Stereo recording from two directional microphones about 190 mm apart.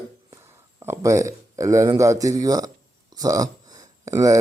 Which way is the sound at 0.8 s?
15° right (ahead or behind).